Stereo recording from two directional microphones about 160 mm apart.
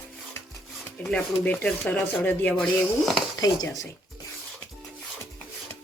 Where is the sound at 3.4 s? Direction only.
20° left (ahead or behind).